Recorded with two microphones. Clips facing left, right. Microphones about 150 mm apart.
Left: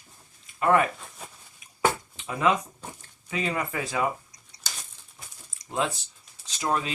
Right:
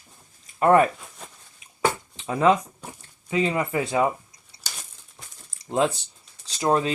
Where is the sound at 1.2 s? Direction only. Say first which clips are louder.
Even; 5° left (ahead or behind).